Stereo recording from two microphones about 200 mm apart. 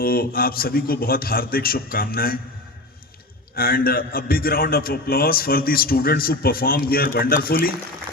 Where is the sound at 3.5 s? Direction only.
50° left (ahead or behind).